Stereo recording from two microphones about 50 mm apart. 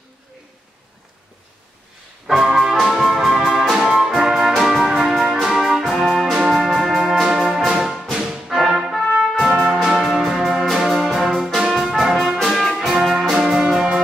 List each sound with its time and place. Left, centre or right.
2.2 s music: centre
9.3 s music: centre
11.7 s brass instrument: centre
12.4 s music: centre